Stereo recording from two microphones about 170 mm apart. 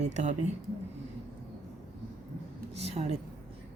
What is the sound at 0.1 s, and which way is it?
Speech, 45° right (ahead or behind).